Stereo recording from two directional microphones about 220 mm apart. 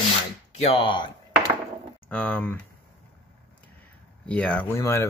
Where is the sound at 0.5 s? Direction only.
25° left (ahead or behind).